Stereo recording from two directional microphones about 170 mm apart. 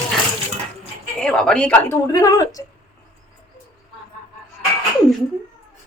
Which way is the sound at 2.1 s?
20° left (ahead or behind).